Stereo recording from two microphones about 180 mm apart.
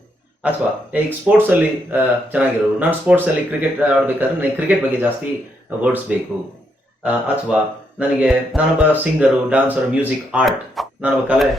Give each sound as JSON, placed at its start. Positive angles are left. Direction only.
{"t": 0.9, "sound": "speech", "side_deg": -10}